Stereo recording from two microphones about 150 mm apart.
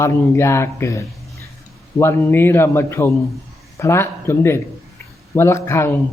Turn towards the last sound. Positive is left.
turn(degrees=15)  # may be behind; listen again after turning